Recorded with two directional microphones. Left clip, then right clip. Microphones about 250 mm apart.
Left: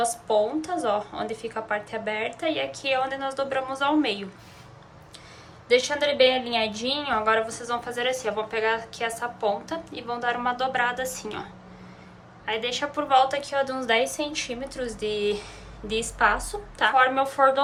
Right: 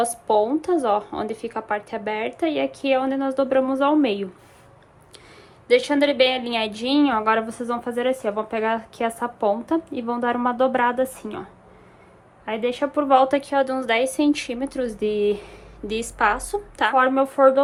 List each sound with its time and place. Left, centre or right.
0.0 s a woman's voice: right
5.6 s a woman's voice: right
12.5 s a woman's voice: centre
15.9 s a woman's voice: right
17.0 s a woman's voice: centre